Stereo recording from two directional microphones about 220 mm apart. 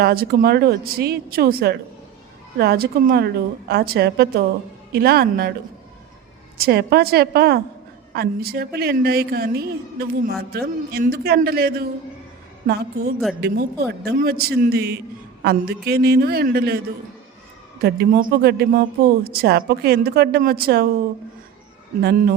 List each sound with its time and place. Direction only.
0.0 s speech: 45° right (ahead or behind)
6.6 s speech: 45° right (ahead or behind)